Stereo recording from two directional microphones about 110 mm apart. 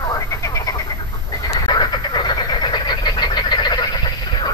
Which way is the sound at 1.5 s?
40° left (ahead or behind).